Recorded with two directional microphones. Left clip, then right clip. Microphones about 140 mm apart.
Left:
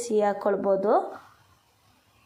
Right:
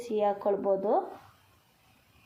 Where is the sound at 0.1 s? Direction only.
25° left (ahead or behind).